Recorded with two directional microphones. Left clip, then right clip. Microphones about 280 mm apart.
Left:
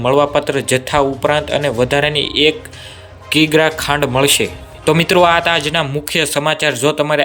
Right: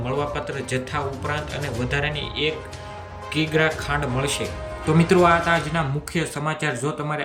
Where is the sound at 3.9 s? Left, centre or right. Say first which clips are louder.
Left 11 dB; centre.